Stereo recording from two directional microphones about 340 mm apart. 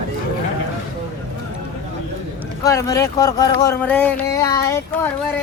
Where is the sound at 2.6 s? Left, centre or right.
Centre.